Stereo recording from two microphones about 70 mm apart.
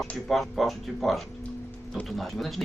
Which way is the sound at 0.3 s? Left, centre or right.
Centre.